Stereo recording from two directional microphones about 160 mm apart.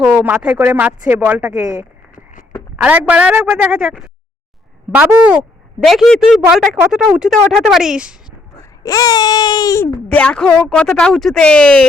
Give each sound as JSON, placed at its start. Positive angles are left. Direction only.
{"t": 0.3, "sound": "a woman's voice", "side_deg": -10}
{"t": 8.8, "sound": "baby cry", "side_deg": 20}
{"t": 10.1, "sound": "speech", "side_deg": 10}